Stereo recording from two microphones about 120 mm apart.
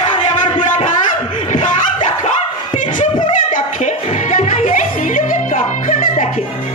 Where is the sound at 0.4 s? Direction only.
90° left.